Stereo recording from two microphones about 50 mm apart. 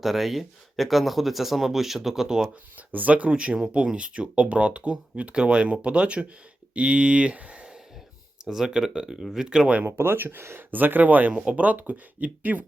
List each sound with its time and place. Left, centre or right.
0.0 s speech: centre
2.7 s speech: right; by 9.7 s centre
9.8 s speech: right